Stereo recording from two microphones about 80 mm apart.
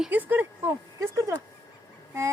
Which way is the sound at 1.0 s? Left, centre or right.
Right.